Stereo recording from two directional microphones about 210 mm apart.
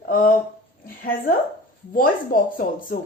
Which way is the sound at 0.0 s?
40° left (ahead or behind).